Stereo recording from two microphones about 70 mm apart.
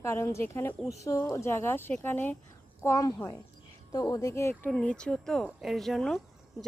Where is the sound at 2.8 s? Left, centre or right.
Left.